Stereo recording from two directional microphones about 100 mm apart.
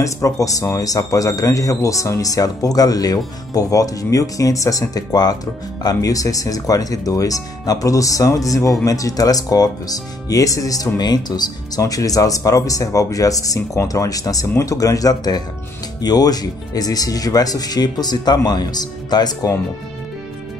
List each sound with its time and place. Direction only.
0.0 s speech: 35° left (ahead or behind)